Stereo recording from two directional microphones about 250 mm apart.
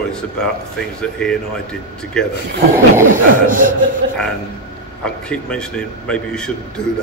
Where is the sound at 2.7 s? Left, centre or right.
Centre.